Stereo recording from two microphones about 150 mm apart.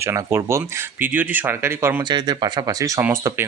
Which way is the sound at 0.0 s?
15° right (ahead or behind).